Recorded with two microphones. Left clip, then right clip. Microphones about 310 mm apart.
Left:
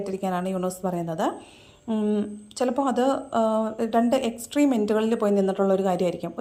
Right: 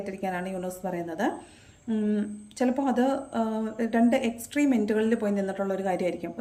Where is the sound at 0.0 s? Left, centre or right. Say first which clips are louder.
Left 4 dB; centre.